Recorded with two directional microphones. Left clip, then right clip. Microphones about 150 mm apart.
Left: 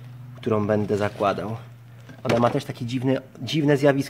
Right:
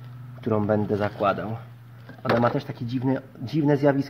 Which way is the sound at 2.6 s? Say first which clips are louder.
Left 2 dB; 15° left (ahead or behind).